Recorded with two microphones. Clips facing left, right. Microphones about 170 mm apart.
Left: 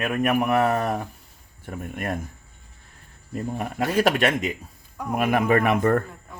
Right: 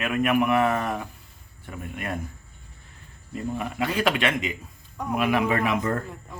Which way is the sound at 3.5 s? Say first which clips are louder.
Left 4 dB; 40° left (ahead or behind).